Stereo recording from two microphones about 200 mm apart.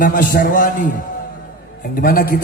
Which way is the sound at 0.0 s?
40° left (ahead or behind).